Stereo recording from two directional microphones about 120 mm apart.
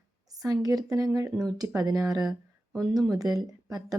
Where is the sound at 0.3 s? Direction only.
30° right (ahead or behind).